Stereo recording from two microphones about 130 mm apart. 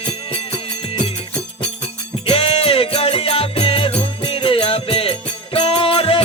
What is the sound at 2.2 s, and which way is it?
Music, 45° left (ahead or behind).